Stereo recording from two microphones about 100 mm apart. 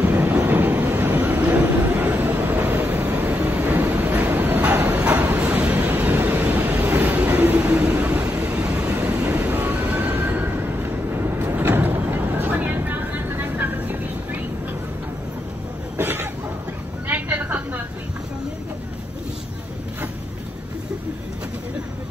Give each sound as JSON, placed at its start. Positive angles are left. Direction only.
{"t": 0.0, "sound": "vehicle", "side_deg": -20}
{"t": 4.9, "sound": "train", "side_deg": -15}
{"t": 16.0, "sound": "a sound", "side_deg": -20}